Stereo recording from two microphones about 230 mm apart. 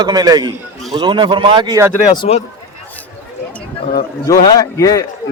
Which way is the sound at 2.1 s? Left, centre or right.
Left.